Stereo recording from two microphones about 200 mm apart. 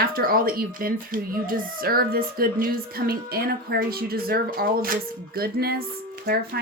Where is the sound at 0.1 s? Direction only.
45° right (ahead or behind).